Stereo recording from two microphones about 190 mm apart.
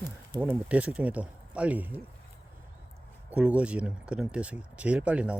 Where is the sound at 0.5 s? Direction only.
5° right (ahead or behind).